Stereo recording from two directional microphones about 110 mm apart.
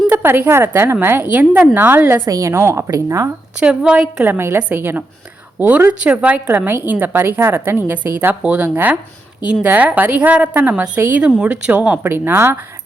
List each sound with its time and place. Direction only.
0.1 s a woman's voice: 20° right (ahead or behind)
3.6 s a woman's voice: 5° right (ahead or behind)
4.2 s a woman's voice: 20° right (ahead or behind)